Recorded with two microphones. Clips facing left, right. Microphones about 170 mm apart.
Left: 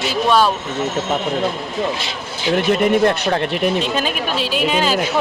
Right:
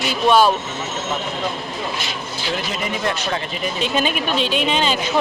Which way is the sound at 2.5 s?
55° left (ahead or behind).